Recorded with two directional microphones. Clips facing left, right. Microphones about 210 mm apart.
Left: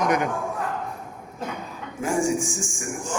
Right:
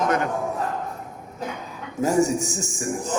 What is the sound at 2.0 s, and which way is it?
A man's voice, 40° right (ahead or behind).